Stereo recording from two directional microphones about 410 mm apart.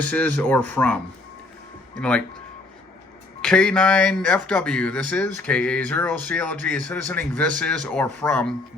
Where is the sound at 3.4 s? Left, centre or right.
Centre.